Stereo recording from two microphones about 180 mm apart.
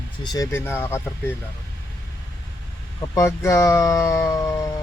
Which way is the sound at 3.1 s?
15° left (ahead or behind).